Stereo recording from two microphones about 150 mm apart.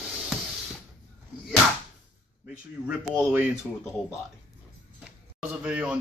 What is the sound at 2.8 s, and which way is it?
Speech, 10° right (ahead or behind).